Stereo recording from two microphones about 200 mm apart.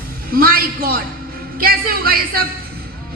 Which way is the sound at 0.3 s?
50° right (ahead or behind).